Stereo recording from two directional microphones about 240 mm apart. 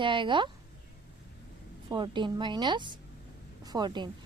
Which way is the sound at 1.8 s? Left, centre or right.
Centre.